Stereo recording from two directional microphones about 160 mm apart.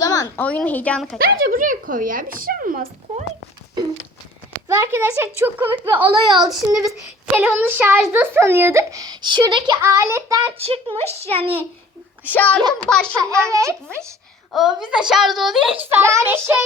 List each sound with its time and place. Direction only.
0.0 s a sound: 20° left (ahead or behind)
0.4 s speech: 10° left (ahead or behind)
1.2 s speech: 60° right (ahead or behind)
4.7 s a child's voice: 15° right (ahead or behind)
6.1 s child singing: 25° right (ahead or behind)
6.5 s a woman's voice: 5° right (ahead or behind); by 9.7 s 30° right (ahead or behind)
9.8 s child singing: 20° right (ahead or behind)
10.6 s a woman's voice: 35° right (ahead or behind)
12.3 s a woman's voice: 10° left (ahead or behind)
13.1 s child singing: 15° right (ahead or behind)
14.5 s a woman's voice: 5° right (ahead or behind)
15.8 s a child's voice: 15° right (ahead or behind)